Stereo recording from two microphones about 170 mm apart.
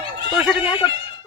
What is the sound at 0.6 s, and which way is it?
Speech, 25° left (ahead or behind).